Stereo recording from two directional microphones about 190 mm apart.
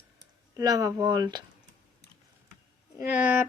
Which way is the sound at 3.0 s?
10° right (ahead or behind).